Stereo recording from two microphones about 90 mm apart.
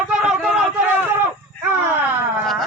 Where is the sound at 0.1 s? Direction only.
5° right (ahead or behind).